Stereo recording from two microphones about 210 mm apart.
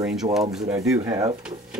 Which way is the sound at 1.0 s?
15° right (ahead or behind).